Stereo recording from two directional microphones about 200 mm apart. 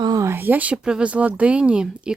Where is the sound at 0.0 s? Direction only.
15° right (ahead or behind).